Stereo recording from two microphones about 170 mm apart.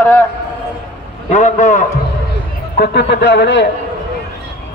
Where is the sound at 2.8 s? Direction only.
85° left.